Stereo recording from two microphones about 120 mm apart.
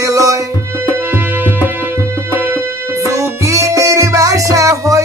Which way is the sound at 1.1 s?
15° right (ahead or behind).